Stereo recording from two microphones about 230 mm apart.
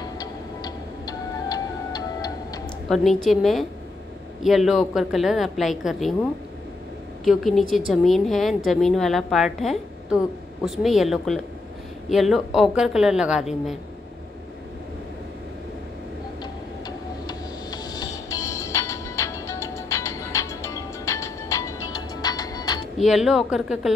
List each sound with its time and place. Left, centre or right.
0.2 s music: centre
2.9 s a woman's voice: centre
7.2 s a woman's voice: centre
16.8 s music: centre
22.9 s a woman's voice: centre